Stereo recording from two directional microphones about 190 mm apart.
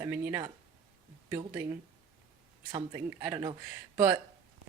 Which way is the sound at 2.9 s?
15° right (ahead or behind).